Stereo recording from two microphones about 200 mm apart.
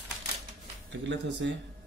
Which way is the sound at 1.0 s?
65° right (ahead or behind).